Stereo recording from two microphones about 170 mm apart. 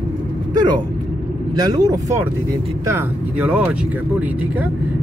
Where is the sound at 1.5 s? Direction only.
25° right (ahead or behind).